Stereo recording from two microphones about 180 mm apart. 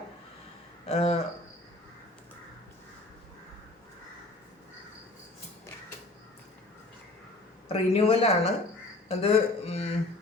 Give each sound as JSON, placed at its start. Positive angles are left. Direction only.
{"t": 0.9, "sound": "speech", "side_deg": 35}
{"t": 7.7, "sound": "speech", "side_deg": 35}
{"t": 9.0, "sound": "a sound", "side_deg": 35}